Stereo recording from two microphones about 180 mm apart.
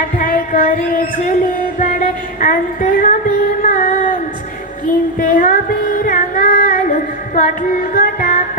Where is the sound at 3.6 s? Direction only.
50° left (ahead or behind).